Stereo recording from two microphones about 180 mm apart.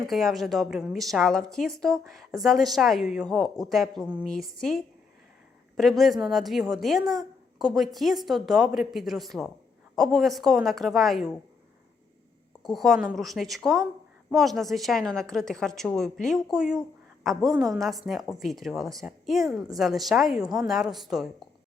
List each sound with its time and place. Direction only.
0.1 s a woman's voice: centre (ahead or behind)
12.6 s a woman's voice: centre (ahead or behind)
20.4 s a woman's voice: 20° right (ahead or behind)
20.7 s a woman's voice: centre (ahead or behind)